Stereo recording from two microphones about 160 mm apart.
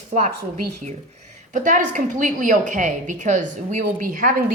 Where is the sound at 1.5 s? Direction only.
55° right (ahead or behind).